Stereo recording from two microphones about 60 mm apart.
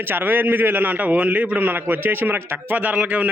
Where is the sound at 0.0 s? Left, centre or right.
Right.